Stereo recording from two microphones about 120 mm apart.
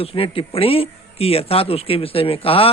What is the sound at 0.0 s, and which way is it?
A man's voice, 50° left (ahead or behind).